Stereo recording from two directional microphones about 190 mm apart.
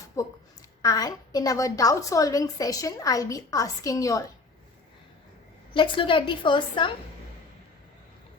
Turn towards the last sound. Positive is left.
turn(degrees=25)  # may be behind; listen again after turning